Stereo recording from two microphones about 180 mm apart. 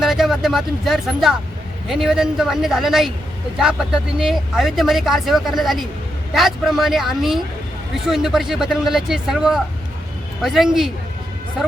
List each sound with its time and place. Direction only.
0.0 s speech: centre (ahead or behind)